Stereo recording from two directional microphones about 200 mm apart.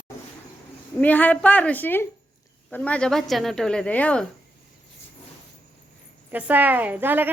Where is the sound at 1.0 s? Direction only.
10° left (ahead or behind).